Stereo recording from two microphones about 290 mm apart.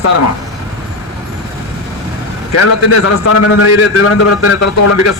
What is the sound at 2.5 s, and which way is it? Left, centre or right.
A man's voice, left.